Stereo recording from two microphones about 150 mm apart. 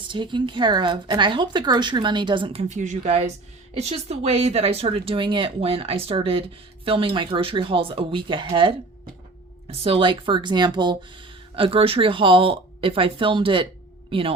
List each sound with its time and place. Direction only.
0.1 s speech: 35° right (ahead or behind)